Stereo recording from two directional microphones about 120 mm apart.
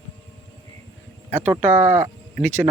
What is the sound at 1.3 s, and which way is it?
Speech, 20° right (ahead or behind).